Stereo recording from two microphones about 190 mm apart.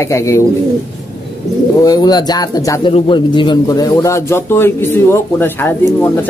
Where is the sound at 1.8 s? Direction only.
20° left (ahead or behind).